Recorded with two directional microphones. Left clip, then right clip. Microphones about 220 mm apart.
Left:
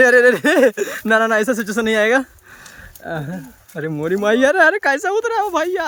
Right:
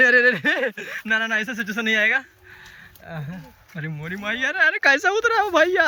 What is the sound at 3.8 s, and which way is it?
Speech, 35° left (ahead or behind).